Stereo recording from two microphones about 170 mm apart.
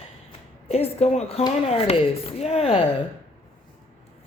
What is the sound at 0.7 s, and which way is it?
A woman's voice, 40° left (ahead or behind).